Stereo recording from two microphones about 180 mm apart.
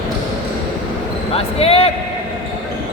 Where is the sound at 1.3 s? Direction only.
35° left (ahead or behind).